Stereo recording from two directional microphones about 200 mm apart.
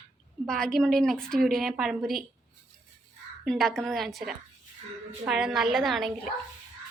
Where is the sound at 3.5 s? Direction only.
Centre (ahead or behind).